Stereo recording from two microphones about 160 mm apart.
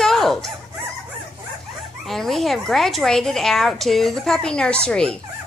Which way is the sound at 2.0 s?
Centre (ahead or behind).